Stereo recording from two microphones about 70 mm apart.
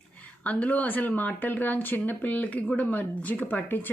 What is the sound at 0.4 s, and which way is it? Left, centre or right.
A woman's voice, left.